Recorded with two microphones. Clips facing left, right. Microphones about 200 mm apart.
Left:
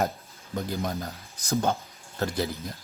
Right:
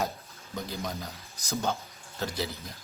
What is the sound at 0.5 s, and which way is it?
Speech, 55° left (ahead or behind).